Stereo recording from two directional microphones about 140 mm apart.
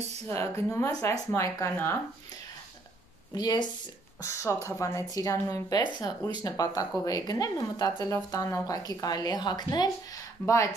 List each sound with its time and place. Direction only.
0.3 s speech: 15° left (ahead or behind)
3.3 s speech: 30° left (ahead or behind)